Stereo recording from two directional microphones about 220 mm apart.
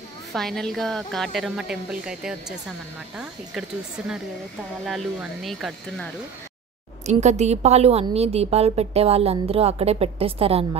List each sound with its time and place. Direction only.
0.3 s a woman's voice: centre (ahead or behind)
4.8 s a woman's voice: centre (ahead or behind)
7.1 s a woman's voice: 30° right (ahead or behind)